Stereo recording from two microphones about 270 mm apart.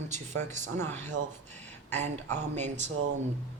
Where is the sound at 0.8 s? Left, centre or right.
Centre.